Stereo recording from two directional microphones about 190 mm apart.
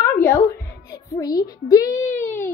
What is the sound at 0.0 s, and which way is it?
Music, 15° left (ahead or behind).